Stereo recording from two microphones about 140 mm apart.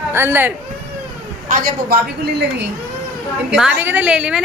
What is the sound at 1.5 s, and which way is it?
Speech, 80° right.